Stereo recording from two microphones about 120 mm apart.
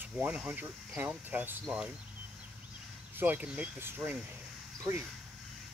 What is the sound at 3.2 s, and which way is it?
Speech, 15° right (ahead or behind).